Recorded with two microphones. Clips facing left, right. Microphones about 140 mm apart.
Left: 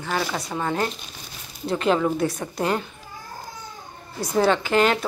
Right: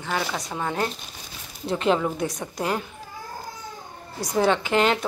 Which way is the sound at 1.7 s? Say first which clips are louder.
Left 2 dB; 20° right (ahead or behind).